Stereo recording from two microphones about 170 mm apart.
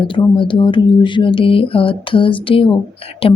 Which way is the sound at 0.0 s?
30° left (ahead or behind).